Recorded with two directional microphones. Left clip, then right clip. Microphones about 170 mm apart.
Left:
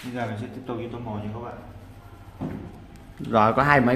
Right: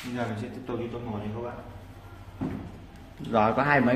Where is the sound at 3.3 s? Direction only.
25° left (ahead or behind).